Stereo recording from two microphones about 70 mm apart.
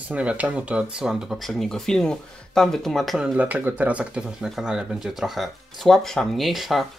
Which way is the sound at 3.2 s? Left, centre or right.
Right.